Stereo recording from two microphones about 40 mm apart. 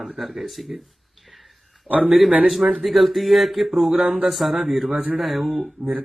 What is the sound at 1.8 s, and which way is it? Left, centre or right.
Speech, right.